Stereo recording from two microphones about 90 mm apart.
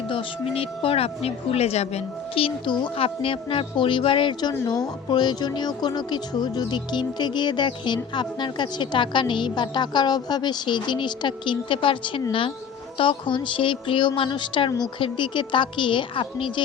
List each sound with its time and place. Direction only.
0.1 s speech: 80° left
2.3 s a woman's voice: 75° left (ahead or behind)
13.0 s a woman's voice: 65° left (ahead or behind)